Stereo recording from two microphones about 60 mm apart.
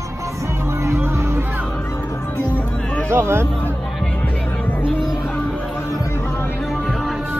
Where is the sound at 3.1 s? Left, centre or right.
Right.